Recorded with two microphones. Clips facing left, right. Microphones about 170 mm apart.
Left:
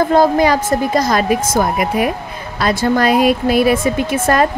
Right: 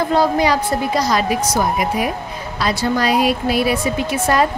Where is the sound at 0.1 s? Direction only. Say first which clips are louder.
Left 4 dB; 50° left (ahead or behind).